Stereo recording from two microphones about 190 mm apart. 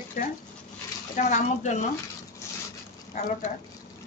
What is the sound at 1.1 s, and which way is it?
Speech, 40° left (ahead or behind).